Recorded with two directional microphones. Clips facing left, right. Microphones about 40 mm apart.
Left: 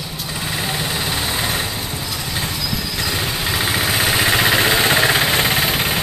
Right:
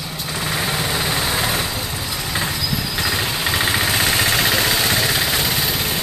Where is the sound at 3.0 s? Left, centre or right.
Centre; by 5.9 s left.